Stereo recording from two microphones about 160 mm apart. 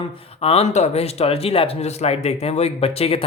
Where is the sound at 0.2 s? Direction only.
40° left (ahead or behind).